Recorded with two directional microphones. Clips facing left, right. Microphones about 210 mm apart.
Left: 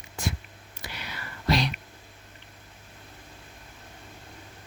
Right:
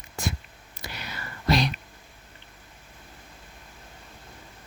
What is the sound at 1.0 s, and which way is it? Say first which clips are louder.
Whispering: right 2 dB; 45° right (ahead or behind).